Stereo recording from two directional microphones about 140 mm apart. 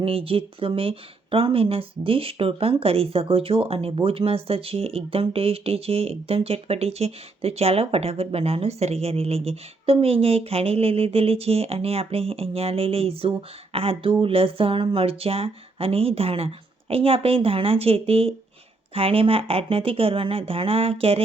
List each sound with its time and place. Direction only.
0.0 s speech: 40° right (ahead or behind)